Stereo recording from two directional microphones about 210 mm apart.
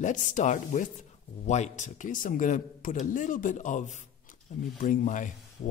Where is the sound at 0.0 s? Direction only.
35° left (ahead or behind).